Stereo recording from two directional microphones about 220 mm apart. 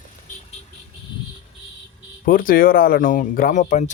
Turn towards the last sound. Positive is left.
turn(degrees=35)  # may be behind; listen again after turning